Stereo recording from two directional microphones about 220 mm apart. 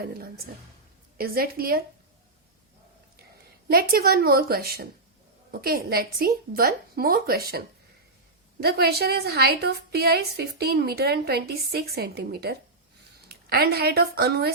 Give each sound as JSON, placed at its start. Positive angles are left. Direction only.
{"t": 1.2, "sound": "a woman's voice", "side_deg": -45}
{"t": 3.7, "sound": "a woman's voice", "side_deg": -45}
{"t": 8.6, "sound": "a woman's voice", "side_deg": -45}